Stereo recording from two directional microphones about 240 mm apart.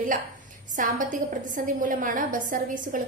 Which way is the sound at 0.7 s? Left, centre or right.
Right.